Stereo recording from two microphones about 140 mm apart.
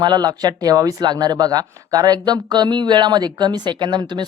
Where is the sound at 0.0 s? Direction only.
30° right (ahead or behind).